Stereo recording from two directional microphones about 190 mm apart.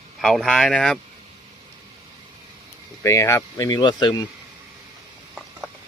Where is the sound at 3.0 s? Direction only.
15° left (ahead or behind).